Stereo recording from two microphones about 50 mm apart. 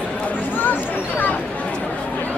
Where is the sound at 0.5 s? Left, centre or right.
Left.